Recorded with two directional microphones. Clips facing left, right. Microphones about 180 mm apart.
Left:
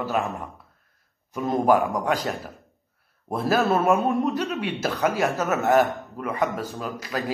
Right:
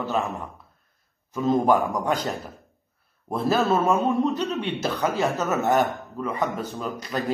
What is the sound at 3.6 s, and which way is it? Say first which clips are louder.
Speech: left 1 dB; 15° left (ahead or behind).